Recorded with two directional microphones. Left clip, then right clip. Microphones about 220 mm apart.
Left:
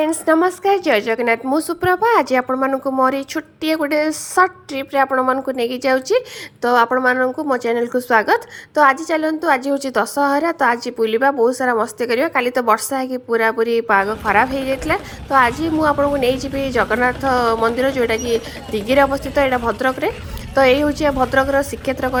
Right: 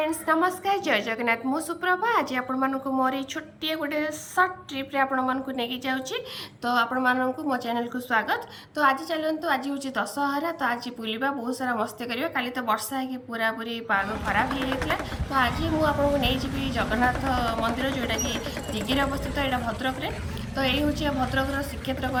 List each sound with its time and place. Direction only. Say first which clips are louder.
0.0 s a woman's voice: left 8 dB; 30° left (ahead or behind)